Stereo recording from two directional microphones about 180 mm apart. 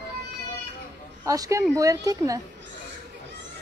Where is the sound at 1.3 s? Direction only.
20° right (ahead or behind).